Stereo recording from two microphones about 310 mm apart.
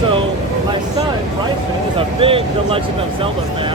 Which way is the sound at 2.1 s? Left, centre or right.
Centre.